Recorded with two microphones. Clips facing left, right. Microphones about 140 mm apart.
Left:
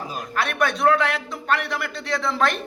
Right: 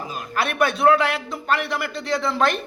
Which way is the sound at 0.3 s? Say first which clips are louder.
Right 2 dB; 5° right (ahead or behind).